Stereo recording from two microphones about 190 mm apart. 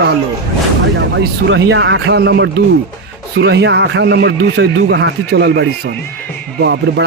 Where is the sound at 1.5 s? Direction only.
75° right (ahead or behind).